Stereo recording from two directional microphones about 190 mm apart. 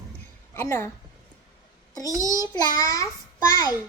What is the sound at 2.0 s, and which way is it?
Speech, 20° right (ahead or behind).